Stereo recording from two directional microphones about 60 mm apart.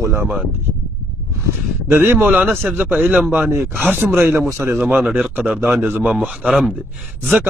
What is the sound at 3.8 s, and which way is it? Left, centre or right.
Speech, right.